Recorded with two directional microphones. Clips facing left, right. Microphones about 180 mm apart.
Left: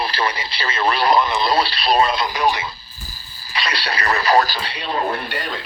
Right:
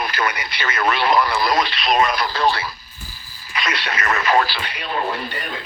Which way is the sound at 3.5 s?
35° left (ahead or behind).